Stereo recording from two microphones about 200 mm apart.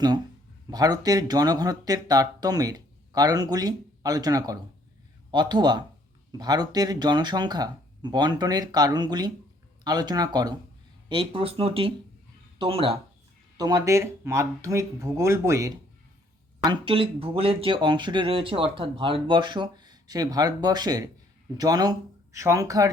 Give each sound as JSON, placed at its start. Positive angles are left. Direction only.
{"t": 0.7, "sound": "speech", "side_deg": -20}
{"t": 16.6, "sound": "speech", "side_deg": -25}